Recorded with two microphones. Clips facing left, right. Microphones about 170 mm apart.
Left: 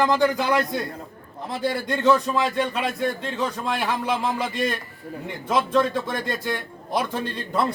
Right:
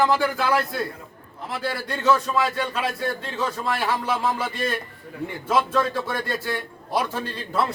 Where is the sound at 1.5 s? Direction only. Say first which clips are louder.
Left 3 dB; 20° left (ahead or behind).